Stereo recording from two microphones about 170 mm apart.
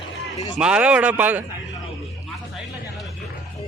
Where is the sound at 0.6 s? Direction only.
5° right (ahead or behind).